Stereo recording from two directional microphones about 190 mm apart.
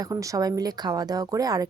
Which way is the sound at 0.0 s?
15° right (ahead or behind).